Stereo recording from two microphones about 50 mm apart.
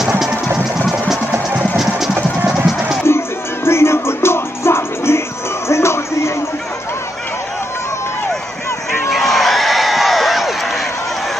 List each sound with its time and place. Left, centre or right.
2.4 s music: centre
3.1 s music: left
9.1 s a sound: centre